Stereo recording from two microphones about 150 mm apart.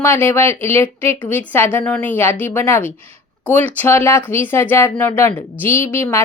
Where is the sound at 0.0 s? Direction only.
15° left (ahead or behind).